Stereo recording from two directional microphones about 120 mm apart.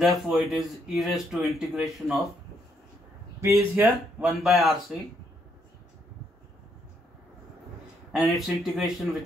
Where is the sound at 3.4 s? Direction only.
25° right (ahead or behind).